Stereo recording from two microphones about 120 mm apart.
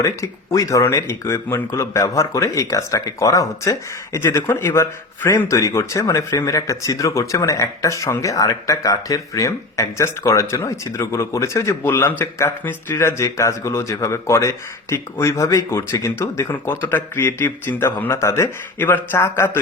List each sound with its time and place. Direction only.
0.0 s speech: 25° left (ahead or behind)